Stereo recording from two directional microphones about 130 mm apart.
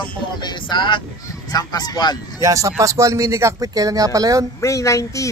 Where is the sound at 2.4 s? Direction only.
25° right (ahead or behind).